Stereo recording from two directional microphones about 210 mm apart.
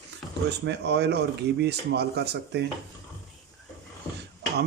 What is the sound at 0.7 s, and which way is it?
Speech, 55° right (ahead or behind).